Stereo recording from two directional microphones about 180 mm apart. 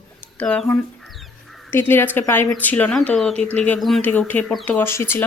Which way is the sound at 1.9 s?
10° left (ahead or behind).